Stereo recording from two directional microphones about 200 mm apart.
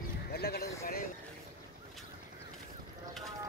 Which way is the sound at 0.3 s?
50° left (ahead or behind).